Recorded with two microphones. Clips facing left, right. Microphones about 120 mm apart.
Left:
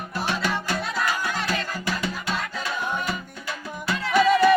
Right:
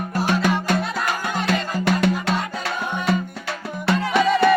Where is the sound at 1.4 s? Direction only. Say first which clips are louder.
Right 7 dB; 65° right (ahead or behind).